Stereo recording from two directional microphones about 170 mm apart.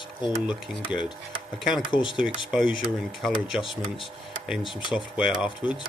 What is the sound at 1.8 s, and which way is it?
Speech, 30° left (ahead or behind).